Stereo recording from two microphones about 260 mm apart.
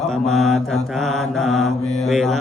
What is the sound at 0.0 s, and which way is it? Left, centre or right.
Mantra, centre.